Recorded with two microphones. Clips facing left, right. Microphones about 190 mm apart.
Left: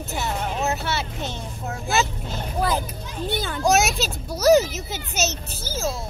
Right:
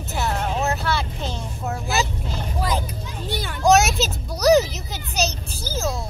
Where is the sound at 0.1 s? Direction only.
Centre (ahead or behind).